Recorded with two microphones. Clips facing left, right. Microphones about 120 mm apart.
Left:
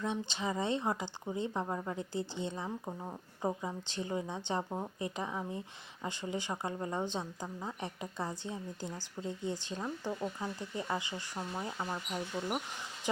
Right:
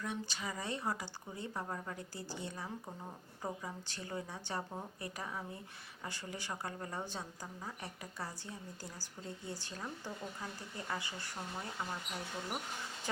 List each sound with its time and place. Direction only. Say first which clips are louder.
0.0 s speech: left 6 dB; 25° left (ahead or behind)